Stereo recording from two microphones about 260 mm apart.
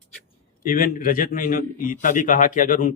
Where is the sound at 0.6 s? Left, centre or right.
Left.